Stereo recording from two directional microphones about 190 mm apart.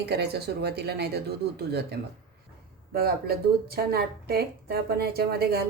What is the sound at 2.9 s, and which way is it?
A woman's voice, 55° right (ahead or behind).